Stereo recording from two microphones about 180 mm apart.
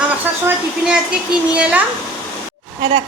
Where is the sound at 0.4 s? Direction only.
5° right (ahead or behind).